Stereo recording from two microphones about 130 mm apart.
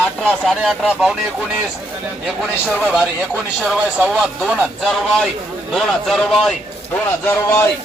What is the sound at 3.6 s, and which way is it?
Speech, 5° right (ahead or behind).